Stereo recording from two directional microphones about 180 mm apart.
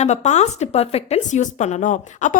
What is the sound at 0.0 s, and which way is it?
Speech, 40° left (ahead or behind).